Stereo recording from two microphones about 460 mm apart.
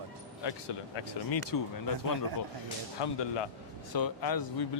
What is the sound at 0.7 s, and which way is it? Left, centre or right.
Speech, left.